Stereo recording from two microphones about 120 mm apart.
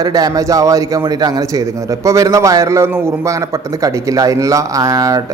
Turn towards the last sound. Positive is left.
turn(degrees=-30)  # may be behind; listen again after turning